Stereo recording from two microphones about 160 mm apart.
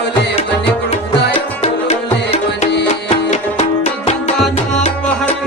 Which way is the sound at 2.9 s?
45° left (ahead or behind).